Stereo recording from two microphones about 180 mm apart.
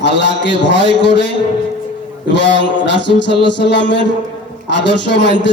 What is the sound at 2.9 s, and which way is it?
A man's voice, 75° left (ahead or behind).